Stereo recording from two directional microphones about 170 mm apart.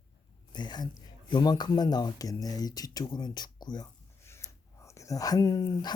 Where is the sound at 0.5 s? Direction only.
25° left (ahead or behind).